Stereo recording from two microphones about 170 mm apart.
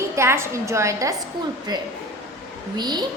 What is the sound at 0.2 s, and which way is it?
A woman's voice, 15° right (ahead or behind).